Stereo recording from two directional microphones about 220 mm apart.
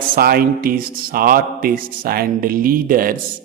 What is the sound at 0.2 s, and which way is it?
A man's voice, 45° right (ahead or behind).